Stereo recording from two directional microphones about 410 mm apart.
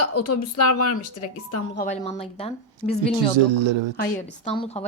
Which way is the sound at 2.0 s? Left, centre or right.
Centre.